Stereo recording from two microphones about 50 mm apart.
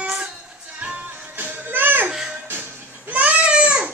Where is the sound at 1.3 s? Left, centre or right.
Right.